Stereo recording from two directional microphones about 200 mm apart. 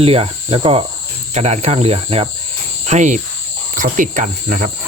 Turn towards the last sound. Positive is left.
turn(degrees=-40)  # may be behind; listen again after turning